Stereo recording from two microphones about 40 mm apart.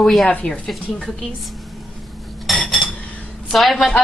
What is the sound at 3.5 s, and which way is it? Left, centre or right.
Speech, centre.